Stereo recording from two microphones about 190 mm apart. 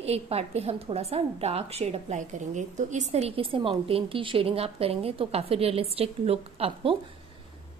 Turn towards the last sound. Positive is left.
turn(degrees=-30)  # may be behind; listen again after turning